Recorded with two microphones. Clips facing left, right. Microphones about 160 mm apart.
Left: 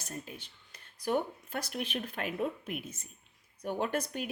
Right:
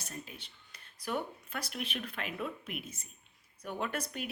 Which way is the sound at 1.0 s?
45° left (ahead or behind).